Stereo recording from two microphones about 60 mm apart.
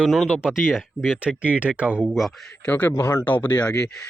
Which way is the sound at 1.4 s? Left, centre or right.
Right.